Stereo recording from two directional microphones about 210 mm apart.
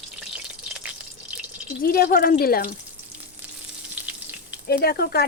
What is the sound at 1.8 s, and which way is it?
Speech, 45° left (ahead or behind).